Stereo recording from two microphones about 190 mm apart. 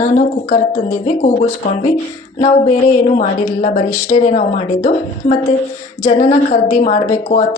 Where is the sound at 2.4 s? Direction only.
35° left (ahead or behind).